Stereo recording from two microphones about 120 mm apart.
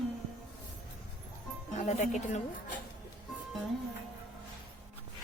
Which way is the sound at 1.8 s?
85° left.